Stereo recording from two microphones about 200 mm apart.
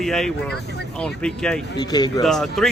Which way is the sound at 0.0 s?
Centre (ahead or behind).